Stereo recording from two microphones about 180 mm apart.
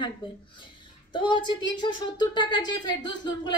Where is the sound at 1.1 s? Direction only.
25° left (ahead or behind).